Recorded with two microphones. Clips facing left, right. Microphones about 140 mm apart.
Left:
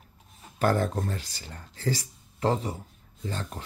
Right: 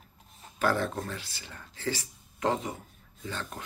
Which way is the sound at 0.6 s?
45° left (ahead or behind).